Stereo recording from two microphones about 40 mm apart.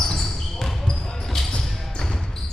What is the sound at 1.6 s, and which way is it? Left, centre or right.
Basketball bounce, centre.